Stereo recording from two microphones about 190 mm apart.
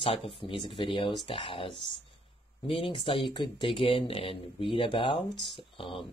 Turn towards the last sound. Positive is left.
turn(degrees=30)  # may be behind; listen again after turning